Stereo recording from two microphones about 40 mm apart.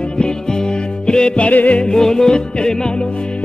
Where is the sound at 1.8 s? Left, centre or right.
Centre.